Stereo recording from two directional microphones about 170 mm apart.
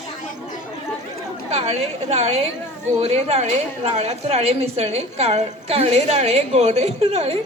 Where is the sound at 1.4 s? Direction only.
40° right (ahead or behind).